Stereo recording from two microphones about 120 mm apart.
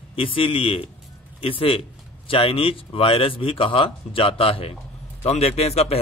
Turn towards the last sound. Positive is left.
turn(degrees=60)  # may be behind; listen again after turning